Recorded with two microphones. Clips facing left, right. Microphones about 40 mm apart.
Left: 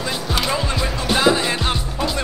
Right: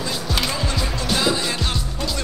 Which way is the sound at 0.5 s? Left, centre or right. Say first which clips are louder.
Left 3 dB; centre.